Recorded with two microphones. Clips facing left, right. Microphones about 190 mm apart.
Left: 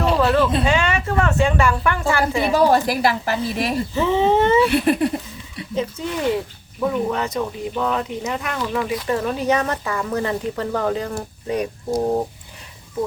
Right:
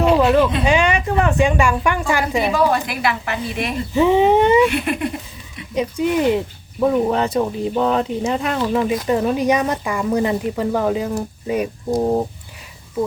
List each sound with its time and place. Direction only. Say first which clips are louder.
0.1 s a sound: right 3 dB; 15° right (ahead or behind)
0.6 s speech: right 3 dB; 15° right (ahead or behind)
2.5 s a woman's voice: left 2 dB; 35° left (ahead or behind)
3.9 s speech: right 5 dB; 15° right (ahead or behind)
4.7 s a woman's voice: left 4 dB; 35° left (ahead or behind)
5.7 s speech: right 6 dB; 15° right (ahead or behind)